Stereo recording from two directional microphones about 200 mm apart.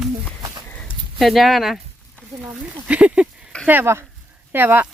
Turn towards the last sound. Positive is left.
turn(degrees=-10)  # may be behind; listen again after turning